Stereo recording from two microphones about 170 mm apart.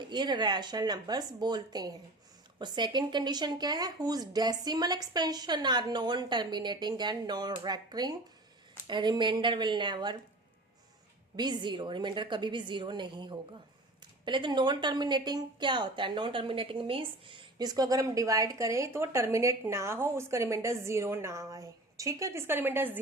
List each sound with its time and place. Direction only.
0.0 s a woman's voice: 25° right (ahead or behind)
11.3 s a woman's voice: 25° right (ahead or behind)